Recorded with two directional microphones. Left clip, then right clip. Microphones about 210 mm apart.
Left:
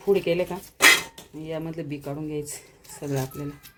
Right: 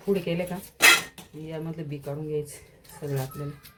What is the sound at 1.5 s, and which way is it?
Speech, 50° left (ahead or behind).